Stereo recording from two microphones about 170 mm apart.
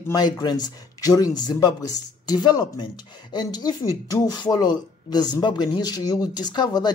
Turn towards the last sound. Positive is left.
turn(degrees=25)  # may be behind; listen again after turning